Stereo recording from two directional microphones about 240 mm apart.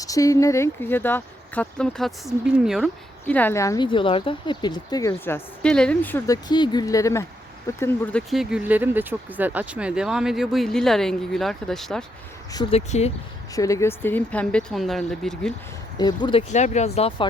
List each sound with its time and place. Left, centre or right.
0.0 s speech: centre
12.5 s speech: centre
12.9 s speech: left
13.6 s speech: centre
16.0 s speech: centre